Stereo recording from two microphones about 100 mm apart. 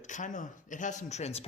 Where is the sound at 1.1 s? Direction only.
90° left.